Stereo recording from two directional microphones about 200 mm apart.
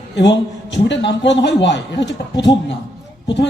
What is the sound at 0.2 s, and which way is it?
A woman's voice, 60° left (ahead or behind).